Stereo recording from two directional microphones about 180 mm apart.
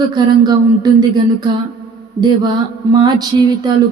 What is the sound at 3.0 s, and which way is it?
Speech, 25° right (ahead or behind).